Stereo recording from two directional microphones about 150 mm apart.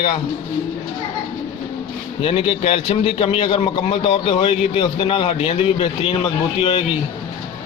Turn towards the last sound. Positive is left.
turn(degrees=40)  # may be behind; listen again after turning